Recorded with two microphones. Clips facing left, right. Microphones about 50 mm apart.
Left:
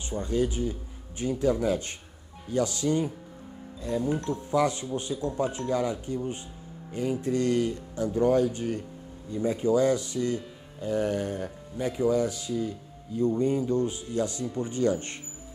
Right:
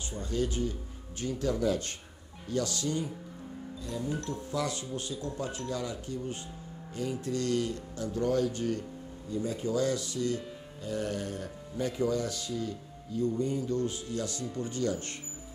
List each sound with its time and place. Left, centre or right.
0.3 s speech: centre